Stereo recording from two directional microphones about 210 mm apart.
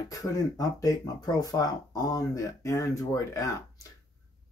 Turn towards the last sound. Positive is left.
turn(degrees=15)  # may be behind; listen again after turning